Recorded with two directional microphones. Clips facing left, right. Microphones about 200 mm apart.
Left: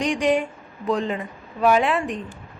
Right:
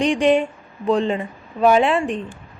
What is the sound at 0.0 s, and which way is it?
A woman's voice, 25° right (ahead or behind).